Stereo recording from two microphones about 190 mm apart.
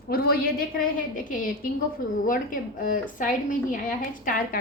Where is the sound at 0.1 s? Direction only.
55° left (ahead or behind).